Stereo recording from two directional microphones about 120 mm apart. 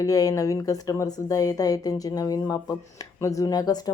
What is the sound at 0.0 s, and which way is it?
A woman's voice, 30° left (ahead or behind).